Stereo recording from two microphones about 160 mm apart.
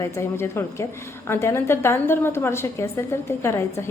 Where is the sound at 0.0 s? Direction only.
15° left (ahead or behind).